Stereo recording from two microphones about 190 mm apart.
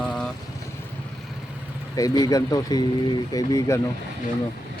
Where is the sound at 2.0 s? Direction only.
20° left (ahead or behind).